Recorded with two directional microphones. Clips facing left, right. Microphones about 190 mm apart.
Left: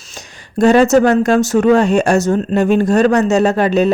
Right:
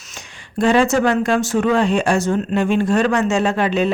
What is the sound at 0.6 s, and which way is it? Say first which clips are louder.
Speech: left 5 dB; 40° left (ahead or behind).